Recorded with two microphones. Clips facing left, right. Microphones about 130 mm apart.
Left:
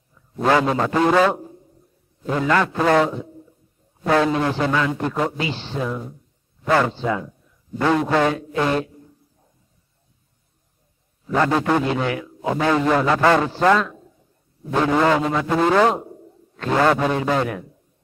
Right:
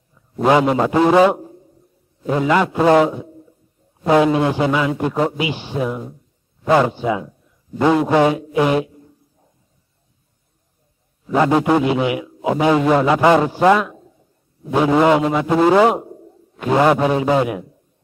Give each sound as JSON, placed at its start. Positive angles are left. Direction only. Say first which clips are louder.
{"t": 0.4, "sound": "a man's voice", "louder": "right 4 dB", "side_deg": -20}
{"t": 11.2, "sound": "a man's voice", "louder": "right 4 dB", "side_deg": -15}